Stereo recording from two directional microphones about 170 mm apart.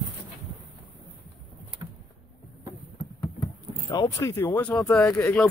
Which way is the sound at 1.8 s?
25° right (ahead or behind).